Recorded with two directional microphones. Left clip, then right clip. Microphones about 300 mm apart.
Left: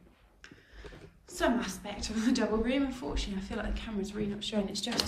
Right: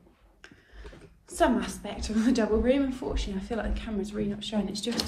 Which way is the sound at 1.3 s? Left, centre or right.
Centre.